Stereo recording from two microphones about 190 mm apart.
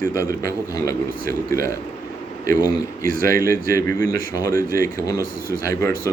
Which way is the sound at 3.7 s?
15° left (ahead or behind).